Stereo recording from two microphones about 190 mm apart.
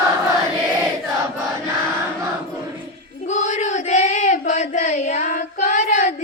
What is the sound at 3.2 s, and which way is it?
Child singing, 40° left (ahead or behind).